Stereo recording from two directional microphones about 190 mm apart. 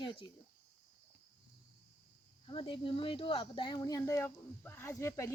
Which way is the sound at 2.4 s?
30° left (ahead or behind).